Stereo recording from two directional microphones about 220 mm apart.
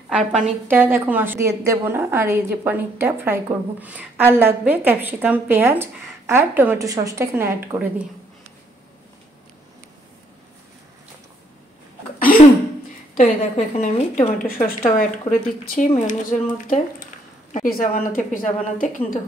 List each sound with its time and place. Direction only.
0.1 s a woman's voice: 5° right (ahead or behind)
13.2 s a woman's voice: 30° left (ahead or behind)
17.5 s a woman's voice: 40° left (ahead or behind)